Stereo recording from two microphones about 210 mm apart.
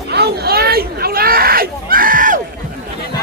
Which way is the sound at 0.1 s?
50° right (ahead or behind).